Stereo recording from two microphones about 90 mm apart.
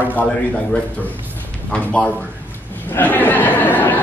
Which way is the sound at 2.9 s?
20° left (ahead or behind).